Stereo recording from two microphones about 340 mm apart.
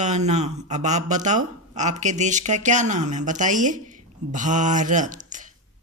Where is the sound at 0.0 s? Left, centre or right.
Centre.